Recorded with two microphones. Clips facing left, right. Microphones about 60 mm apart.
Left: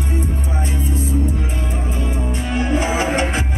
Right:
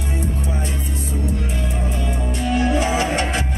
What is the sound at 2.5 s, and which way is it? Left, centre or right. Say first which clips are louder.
Music: right 1 dB; centre.